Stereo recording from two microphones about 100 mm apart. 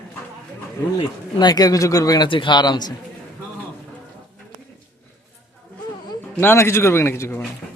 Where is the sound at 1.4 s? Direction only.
45° left (ahead or behind).